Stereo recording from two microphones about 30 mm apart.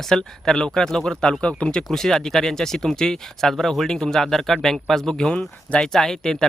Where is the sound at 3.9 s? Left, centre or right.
Left.